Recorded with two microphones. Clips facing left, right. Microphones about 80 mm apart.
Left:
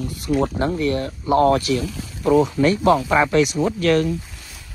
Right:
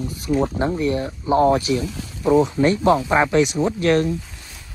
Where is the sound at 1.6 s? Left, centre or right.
Left.